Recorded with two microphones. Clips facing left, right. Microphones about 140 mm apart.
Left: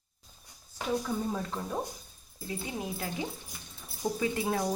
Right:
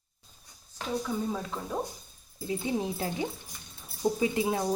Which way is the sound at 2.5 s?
25° right (ahead or behind).